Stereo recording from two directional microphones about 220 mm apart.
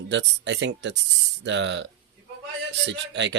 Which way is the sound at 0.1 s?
55° right (ahead or behind).